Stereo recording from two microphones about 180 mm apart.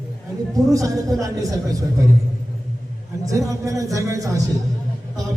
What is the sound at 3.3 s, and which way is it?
A man's voice, 20° right (ahead or behind).